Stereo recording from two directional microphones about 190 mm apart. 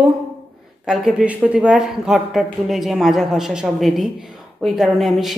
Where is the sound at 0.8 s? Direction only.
5° right (ahead or behind).